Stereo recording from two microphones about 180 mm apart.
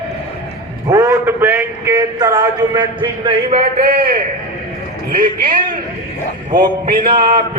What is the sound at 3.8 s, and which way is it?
Speech, 55° right (ahead or behind).